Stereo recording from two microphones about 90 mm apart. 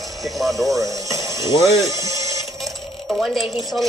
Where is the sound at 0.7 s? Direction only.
40° right (ahead or behind).